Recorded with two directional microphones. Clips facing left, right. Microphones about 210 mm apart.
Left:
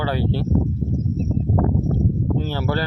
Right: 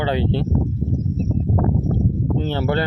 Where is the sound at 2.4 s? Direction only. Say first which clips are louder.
Right 3 dB; 25° right (ahead or behind).